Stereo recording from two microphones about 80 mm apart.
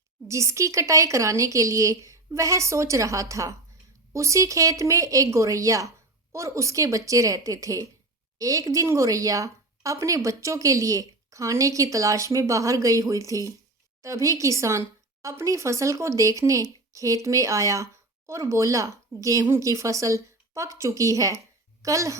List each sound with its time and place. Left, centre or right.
0.3 s a woman's voice: right